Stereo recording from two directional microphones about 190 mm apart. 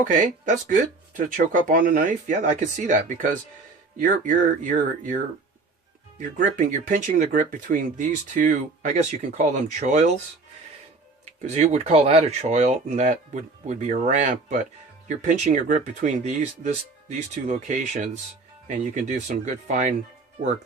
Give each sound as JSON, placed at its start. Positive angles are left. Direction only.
{"t": 0.1, "sound": "speech", "side_deg": -40}
{"t": 6.2, "sound": "speech", "side_deg": -45}
{"t": 11.4, "sound": "speech", "side_deg": -35}